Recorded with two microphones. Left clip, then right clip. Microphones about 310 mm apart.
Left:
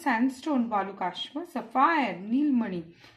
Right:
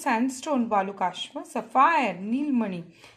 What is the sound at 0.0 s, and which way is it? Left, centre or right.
A woman's voice, right.